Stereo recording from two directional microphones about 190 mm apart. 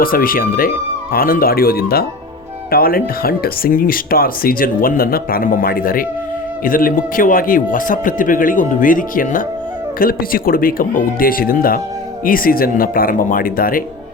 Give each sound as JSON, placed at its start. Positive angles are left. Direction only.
{"t": 0.0, "sound": "speech", "side_deg": 50}